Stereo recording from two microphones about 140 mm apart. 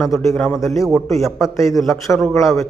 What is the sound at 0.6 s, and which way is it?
Speech, 20° left (ahead or behind).